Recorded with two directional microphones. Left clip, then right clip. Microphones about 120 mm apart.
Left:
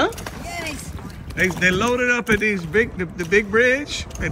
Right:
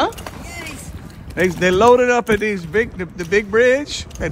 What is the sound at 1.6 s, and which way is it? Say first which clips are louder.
A man's voice: right 9 dB; 35° right (ahead or behind).